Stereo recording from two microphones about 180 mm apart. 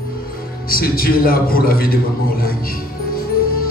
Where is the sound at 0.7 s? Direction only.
55° left (ahead or behind).